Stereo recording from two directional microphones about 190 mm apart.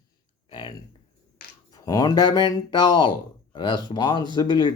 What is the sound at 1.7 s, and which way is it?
Speech, 20° left (ahead or behind).